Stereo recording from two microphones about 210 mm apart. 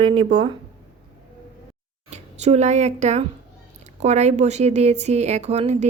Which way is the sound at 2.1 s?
30° right (ahead or behind).